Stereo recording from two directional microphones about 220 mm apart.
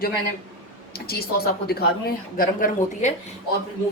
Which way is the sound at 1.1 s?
45° left (ahead or behind).